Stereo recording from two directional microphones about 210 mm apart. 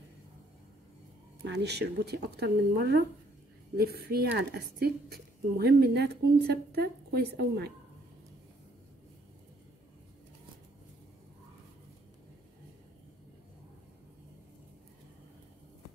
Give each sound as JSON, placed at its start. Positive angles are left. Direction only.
{"t": 1.4, "sound": "a woman's voice", "side_deg": -55}